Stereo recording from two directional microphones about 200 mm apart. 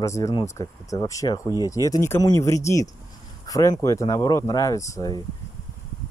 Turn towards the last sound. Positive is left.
turn(degrees=15)  # may be behind; listen again after turning